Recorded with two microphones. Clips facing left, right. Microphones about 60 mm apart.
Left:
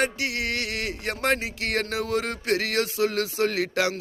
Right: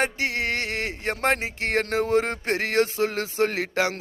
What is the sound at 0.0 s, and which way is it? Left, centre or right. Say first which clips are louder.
Speech: right 1 dB; right.